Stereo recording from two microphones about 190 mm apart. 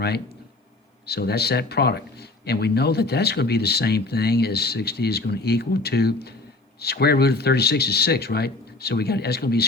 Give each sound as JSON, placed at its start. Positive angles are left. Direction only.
{"t": 1.0, "sound": "speech", "side_deg": 55}